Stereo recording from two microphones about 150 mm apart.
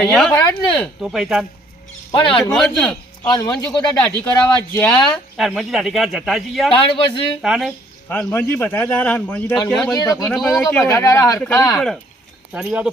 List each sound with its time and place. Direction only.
0.0 s a man's voice: 5° left (ahead or behind)
2.1 s a man's voice: 35° left (ahead or behind)
2.4 s a man's voice: 5° left (ahead or behind)
3.2 s speech: 25° left (ahead or behind)
3.5 s a man's voice: 5° left (ahead or behind)
6.7 s a man's voice: 35° left (ahead or behind)
7.4 s a man's voice: 5° right (ahead or behind)
8.1 s a man's voice: 10° left (ahead or behind)
9.9 s speech: 25° left (ahead or behind)
10.2 s a man's voice: centre (ahead or behind)
10.6 s a man's voice: 10° left (ahead or behind)
12.5 s a man's voice: 5° right (ahead or behind)